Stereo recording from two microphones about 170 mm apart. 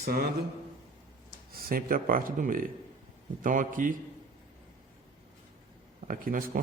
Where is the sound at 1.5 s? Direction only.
55° right (ahead or behind).